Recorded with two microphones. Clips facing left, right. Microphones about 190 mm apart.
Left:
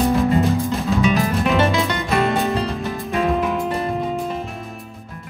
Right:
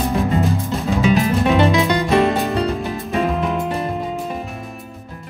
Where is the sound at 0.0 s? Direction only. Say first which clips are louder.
Left 2 dB; centre (ahead or behind).